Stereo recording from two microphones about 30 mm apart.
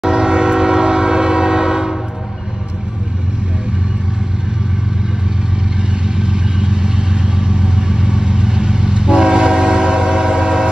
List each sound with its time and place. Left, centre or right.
0.0 s train: right
6.0 s vehicle: right